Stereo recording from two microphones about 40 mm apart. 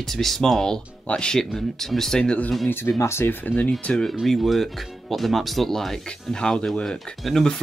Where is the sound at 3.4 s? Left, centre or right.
Left.